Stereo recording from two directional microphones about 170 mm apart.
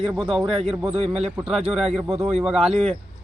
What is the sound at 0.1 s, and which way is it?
Speech, centre (ahead or behind).